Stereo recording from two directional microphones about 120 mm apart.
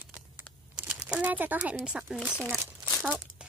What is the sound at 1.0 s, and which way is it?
Speech, 10° right (ahead or behind).